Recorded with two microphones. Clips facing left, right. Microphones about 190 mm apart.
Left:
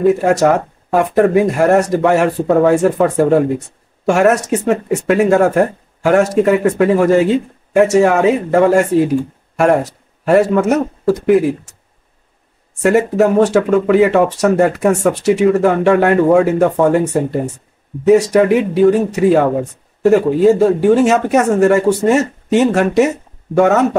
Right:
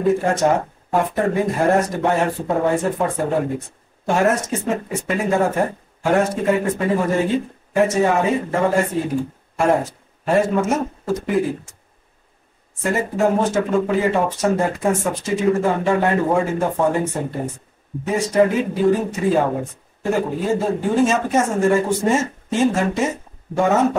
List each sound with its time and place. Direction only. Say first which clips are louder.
0.0 s speech: left 6 dB; 75° left (ahead or behind)
12.8 s speech: left 7 dB; 70° left (ahead or behind)